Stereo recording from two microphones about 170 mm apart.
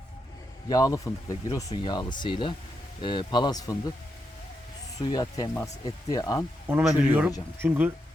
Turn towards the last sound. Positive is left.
turn(degrees=-10)  # may be behind; listen again after turning